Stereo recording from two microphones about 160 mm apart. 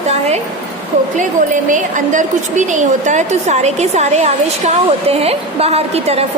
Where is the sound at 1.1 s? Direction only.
50° right (ahead or behind).